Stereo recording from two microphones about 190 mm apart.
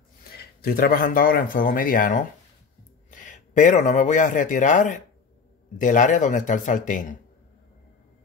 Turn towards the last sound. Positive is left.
turn(degrees=45)  # may be behind; listen again after turning